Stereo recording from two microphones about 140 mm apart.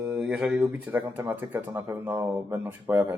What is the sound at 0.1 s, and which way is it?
A man's voice, 5° right (ahead or behind).